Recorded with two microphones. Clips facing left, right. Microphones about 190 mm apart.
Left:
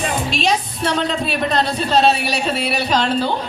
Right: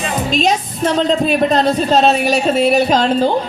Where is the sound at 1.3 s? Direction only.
45° right (ahead or behind).